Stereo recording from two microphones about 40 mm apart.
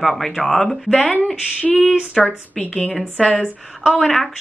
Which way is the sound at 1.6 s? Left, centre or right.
Left.